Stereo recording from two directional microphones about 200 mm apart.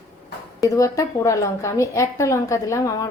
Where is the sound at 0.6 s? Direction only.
15° left (ahead or behind).